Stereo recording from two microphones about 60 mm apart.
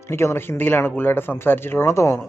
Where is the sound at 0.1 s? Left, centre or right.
Left.